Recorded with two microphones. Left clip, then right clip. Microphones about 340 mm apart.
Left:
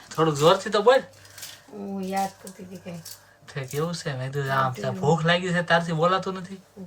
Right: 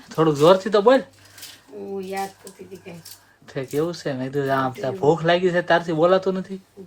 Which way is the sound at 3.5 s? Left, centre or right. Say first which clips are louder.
Right 5 dB; centre.